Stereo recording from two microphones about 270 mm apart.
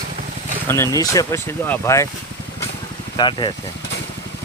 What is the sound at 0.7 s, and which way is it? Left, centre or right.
Speech, centre.